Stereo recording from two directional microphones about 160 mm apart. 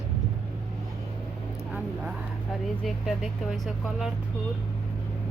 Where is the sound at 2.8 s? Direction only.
Centre (ahead or behind).